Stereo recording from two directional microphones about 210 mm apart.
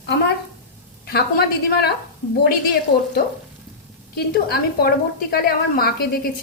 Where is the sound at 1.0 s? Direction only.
45° left (ahead or behind).